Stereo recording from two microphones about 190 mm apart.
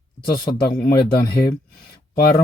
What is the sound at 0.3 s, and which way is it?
Speech, 55° left (ahead or behind).